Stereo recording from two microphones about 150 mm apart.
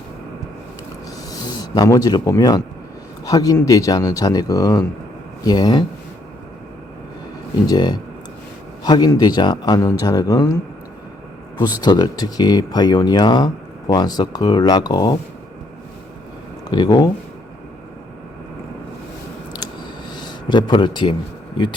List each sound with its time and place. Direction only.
1.3 s speech: 25° left (ahead or behind)
7.7 s speech: 30° left (ahead or behind)
11.8 s speech: 30° left (ahead or behind)
16.6 s speech: 30° left (ahead or behind)
20.1 s speech: 30° left (ahead or behind)